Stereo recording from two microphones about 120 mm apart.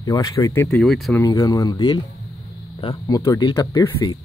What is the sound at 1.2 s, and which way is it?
Speech, 30° left (ahead or behind).